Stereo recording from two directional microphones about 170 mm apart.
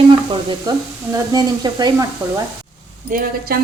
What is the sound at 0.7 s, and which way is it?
Speech, 25° right (ahead or behind).